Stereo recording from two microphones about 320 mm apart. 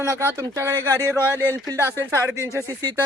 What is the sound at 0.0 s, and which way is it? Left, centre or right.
Speech, centre.